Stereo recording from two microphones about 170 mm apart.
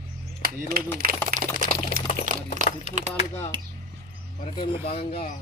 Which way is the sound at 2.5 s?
45° right (ahead or behind).